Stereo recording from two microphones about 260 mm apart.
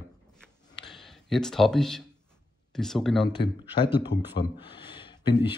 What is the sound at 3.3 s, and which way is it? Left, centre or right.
Speech, centre.